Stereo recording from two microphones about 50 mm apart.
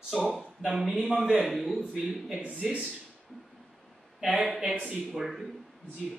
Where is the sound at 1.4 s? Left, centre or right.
Centre.